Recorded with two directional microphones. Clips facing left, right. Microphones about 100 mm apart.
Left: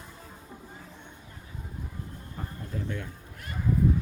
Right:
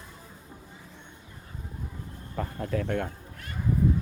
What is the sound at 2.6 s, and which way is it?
Speech, 85° right.